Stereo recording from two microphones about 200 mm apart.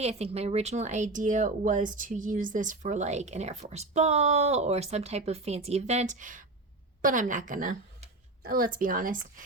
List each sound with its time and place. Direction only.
0.0 s speech: 30° right (ahead or behind)